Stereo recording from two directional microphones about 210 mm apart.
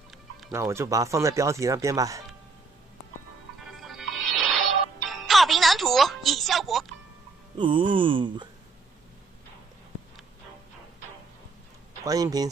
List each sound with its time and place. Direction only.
0.5 s speech: 15° right (ahead or behind)
3.6 s music: centre (ahead or behind)
7.5 s music: 25° right (ahead or behind)
12.0 s speech: 15° right (ahead or behind)